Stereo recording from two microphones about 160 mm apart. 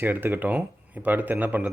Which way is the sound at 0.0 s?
10° right (ahead or behind).